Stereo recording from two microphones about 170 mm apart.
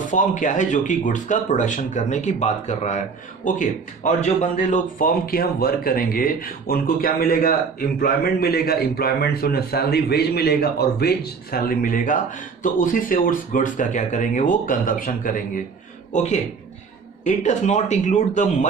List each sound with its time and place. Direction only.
0.1 s speech: 50° left (ahead or behind)